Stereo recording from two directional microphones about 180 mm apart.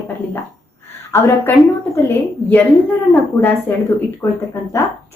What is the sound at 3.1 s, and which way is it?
Speech, 10° left (ahead or behind).